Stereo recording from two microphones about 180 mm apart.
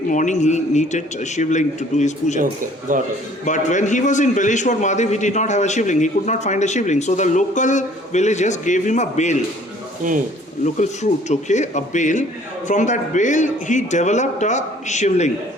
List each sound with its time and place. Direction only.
0.1 s a man's voice: 45° left (ahead or behind)
2.9 s speech: 45° right (ahead or behind)
3.4 s a man's voice: 45° left (ahead or behind)
10.0 s speech: 45° right (ahead or behind)
10.8 s a man's voice: 40° left (ahead or behind)